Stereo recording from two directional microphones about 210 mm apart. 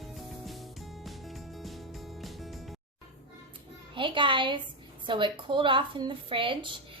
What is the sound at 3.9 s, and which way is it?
A woman's voice, 25° right (ahead or behind).